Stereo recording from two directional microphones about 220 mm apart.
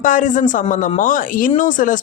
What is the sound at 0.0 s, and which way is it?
Speech, 35° left (ahead or behind).